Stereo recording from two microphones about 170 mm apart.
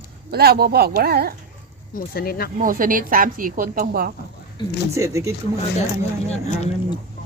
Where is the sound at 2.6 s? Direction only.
55° right (ahead or behind).